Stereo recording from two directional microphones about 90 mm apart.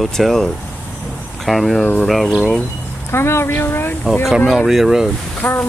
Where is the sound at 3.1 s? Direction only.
30° left (ahead or behind).